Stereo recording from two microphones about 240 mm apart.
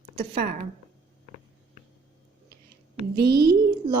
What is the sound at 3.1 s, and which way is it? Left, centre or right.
Speech, right.